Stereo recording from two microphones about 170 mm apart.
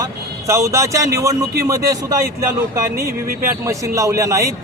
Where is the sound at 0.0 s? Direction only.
20° right (ahead or behind).